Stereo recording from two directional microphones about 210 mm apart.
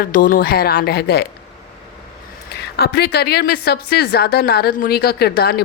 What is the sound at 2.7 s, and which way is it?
A woman's voice, 50° left (ahead or behind).